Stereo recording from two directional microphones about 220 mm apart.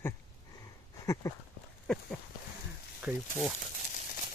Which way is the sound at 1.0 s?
15° left (ahead or behind).